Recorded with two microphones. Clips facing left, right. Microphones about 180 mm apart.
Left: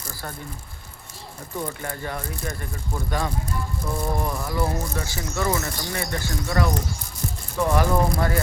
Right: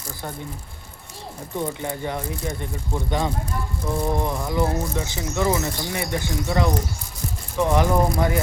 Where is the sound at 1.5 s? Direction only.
15° right (ahead or behind).